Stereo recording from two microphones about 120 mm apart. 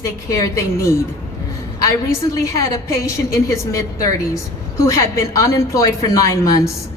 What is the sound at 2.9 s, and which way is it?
A woman's voice, 25° left (ahead or behind).